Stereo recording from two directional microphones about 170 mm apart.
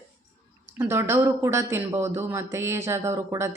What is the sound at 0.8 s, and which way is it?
A woman's voice, 15° right (ahead or behind).